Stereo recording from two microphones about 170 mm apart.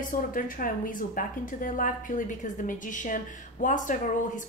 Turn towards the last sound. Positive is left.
turn(degrees=50)  # may be behind; listen again after turning